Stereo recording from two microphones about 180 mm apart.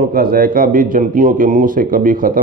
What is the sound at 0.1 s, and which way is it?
A man's voice, 55° right (ahead or behind).